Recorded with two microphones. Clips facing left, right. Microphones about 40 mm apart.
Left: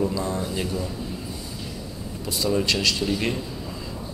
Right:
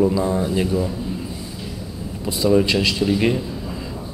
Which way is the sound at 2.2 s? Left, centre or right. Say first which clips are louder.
Right 7 dB; centre.